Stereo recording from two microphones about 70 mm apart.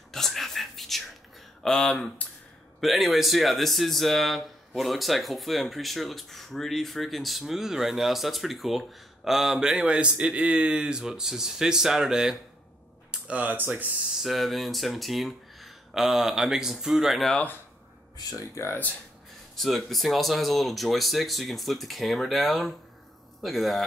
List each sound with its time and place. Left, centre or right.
0.1 s a sound: centre
1.6 s speech: centre
13.4 s speech: right
14.2 s speech: centre
18.5 s speech: left
19.5 s speech: centre